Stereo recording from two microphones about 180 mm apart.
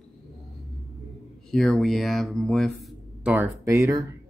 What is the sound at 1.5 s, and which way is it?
Speech, centre (ahead or behind).